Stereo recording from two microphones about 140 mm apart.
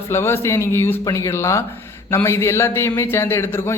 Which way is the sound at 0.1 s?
15° left (ahead or behind).